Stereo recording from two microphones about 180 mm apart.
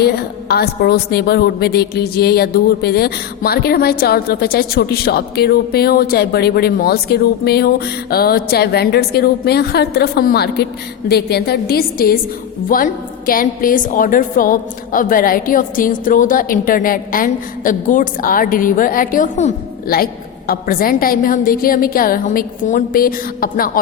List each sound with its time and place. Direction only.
0.0 s a woman's voice: 60° left (ahead or behind); by 19.5 s 45° left (ahead or behind)
20.5 s a woman's voice: 55° left (ahead or behind)